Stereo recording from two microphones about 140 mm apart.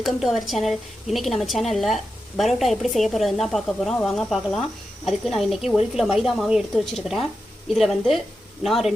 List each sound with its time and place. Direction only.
0.0 s speech: centre (ahead or behind)